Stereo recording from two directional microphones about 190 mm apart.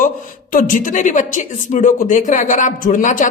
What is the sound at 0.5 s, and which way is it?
A woman's voice, 45° left (ahead or behind).